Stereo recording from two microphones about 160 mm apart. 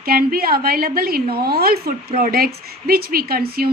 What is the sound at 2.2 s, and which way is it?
A woman's voice, 65° right (ahead or behind).